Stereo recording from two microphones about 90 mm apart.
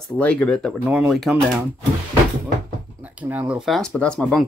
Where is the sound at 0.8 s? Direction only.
10° right (ahead or behind).